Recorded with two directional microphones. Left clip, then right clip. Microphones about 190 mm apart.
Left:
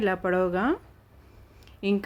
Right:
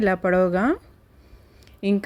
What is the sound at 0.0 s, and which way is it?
Speech, 20° right (ahead or behind).